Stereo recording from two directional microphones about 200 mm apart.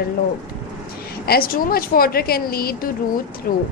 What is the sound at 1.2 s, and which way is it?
Speech, 50° left (ahead or behind).